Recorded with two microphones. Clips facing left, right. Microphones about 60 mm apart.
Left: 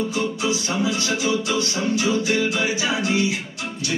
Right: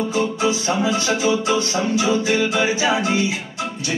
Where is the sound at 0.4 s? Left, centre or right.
Right.